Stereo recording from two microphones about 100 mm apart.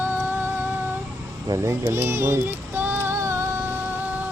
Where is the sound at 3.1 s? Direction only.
30° right (ahead or behind).